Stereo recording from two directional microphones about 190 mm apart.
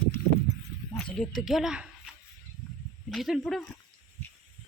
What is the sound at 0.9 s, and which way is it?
Speech, 5° left (ahead or behind).